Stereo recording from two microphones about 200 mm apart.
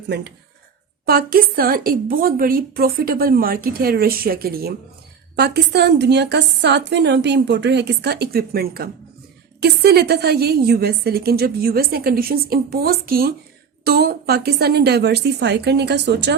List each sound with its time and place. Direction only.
0.1 s a woman's voice: 55° right (ahead or behind)